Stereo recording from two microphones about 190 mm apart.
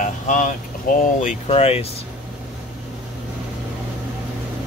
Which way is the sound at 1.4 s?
30° left (ahead or behind).